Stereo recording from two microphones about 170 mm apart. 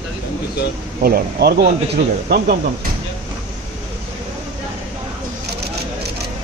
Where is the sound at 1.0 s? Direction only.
65° right (ahead or behind).